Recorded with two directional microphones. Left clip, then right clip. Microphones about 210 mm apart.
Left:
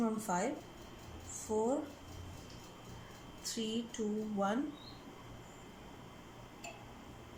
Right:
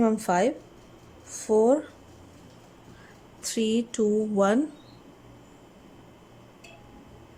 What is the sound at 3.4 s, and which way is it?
Speech, 55° right (ahead or behind).